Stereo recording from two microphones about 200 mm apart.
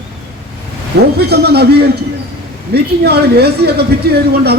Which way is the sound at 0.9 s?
60° right (ahead or behind).